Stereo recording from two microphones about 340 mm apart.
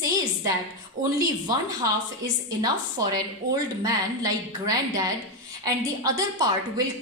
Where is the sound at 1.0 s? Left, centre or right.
Right.